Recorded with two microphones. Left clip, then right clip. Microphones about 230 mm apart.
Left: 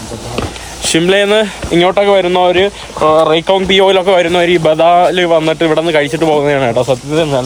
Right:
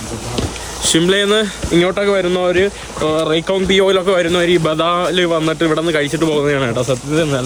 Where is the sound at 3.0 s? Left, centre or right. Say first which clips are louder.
Left 8 dB; left.